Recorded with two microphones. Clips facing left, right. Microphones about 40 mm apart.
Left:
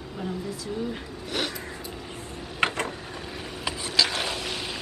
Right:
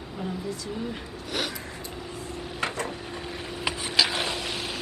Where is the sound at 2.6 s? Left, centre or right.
Left.